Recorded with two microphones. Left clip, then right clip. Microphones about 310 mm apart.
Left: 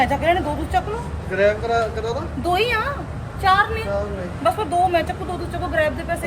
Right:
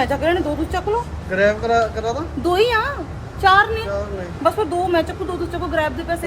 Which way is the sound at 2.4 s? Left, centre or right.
Centre.